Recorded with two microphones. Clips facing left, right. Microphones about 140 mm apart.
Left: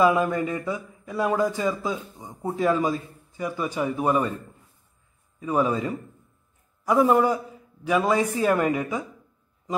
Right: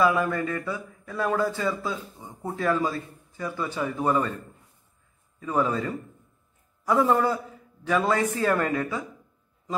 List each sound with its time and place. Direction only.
0.0 s a man's voice: 20° left (ahead or behind)
5.4 s a man's voice: 10° left (ahead or behind)